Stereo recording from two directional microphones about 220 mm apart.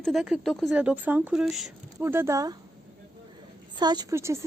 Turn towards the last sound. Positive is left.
turn(degrees=-10)  # may be behind; listen again after turning